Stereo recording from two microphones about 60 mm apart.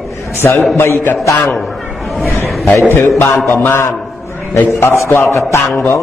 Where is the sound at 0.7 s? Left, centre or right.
Left.